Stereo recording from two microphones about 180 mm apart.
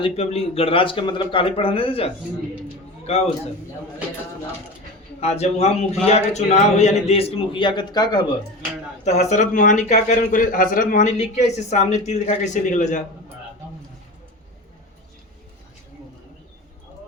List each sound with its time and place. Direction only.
0.0 s a man's voice: 35° left (ahead or behind)
5.2 s a man's voice: 35° left (ahead or behind)
9.0 s a man's voice: 40° left (ahead or behind)